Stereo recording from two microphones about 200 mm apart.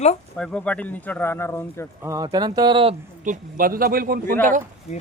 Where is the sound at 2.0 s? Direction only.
15° right (ahead or behind).